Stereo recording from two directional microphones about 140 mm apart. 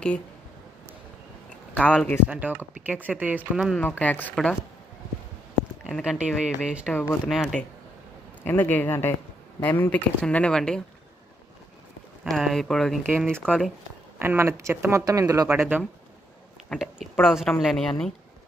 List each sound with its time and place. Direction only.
1.7 s a man's voice: 10° left (ahead or behind)
2.2 s speech: 10° right (ahead or behind)
3.7 s speech: 10° left (ahead or behind)
5.9 s a woman's voice: 5° right (ahead or behind)
8.5 s speech: 15° left (ahead or behind)
12.3 s a woman's voice: centre (ahead or behind)
13.1 s speech: 15° right (ahead or behind)
13.5 s a woman's voice: centre (ahead or behind)
14.1 s speech: 15° right (ahead or behind)
16.7 s a woman's voice: centre (ahead or behind)